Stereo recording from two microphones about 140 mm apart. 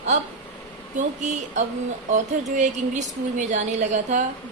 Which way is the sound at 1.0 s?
55° right (ahead or behind).